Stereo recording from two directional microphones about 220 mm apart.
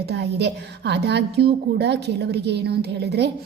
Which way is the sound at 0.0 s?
50° right (ahead or behind).